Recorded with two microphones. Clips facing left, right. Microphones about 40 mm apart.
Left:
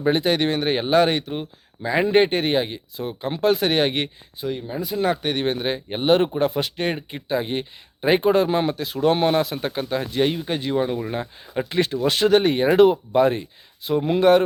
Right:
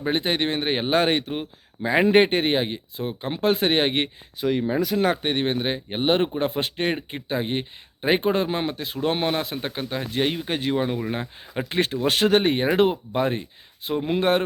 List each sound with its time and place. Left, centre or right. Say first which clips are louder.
0.1 s speech: left 3 dB; centre
4.4 s speech: right 5 dB; right
4.9 s speech: left 3 dB; right
5.2 s speech: left 1 dB; centre
9.4 s speech: left 5 dB; centre
9.6 s speech: left 4 dB; centre
10.2 s speech: left 1 dB; centre
11.7 s speech: left 1 dB; right
12.6 s speech: left 5 dB; centre
13.8 s speech: left 5 dB; right